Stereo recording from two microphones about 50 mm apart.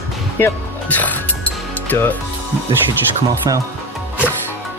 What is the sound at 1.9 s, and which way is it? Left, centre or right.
Speech, left.